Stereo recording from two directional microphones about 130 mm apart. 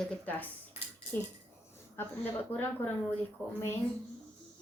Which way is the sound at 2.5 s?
15° left (ahead or behind).